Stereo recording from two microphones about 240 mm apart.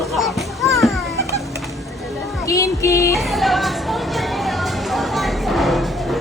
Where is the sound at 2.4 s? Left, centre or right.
Centre.